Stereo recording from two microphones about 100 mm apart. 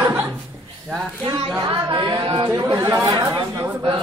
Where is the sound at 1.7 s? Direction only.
55° right (ahead or behind).